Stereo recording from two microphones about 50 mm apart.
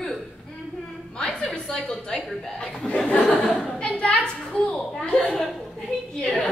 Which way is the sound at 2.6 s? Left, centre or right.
Left.